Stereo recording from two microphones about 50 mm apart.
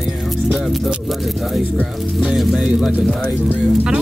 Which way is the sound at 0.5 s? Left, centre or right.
Centre.